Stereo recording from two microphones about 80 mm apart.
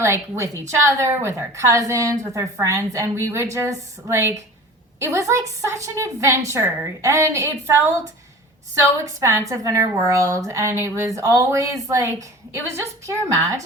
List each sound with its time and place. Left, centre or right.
0.0 s a woman's voice: right
8.8 s a woman's voice: right